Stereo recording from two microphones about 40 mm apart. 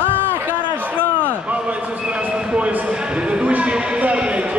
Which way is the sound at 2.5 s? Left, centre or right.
Right.